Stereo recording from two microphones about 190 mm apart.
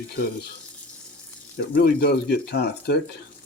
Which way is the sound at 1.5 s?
55° left (ahead or behind).